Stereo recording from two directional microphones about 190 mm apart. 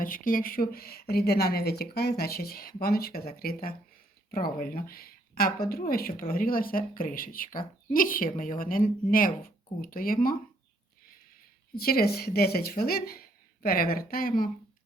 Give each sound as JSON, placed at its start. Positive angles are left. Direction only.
{"t": 0.0, "sound": "speech", "side_deg": 45}
{"t": 11.7, "sound": "speech", "side_deg": 50}